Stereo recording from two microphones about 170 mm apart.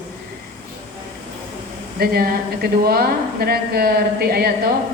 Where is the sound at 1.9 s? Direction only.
65° right (ahead or behind).